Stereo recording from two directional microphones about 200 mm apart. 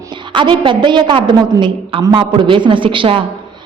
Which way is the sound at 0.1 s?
25° right (ahead or behind).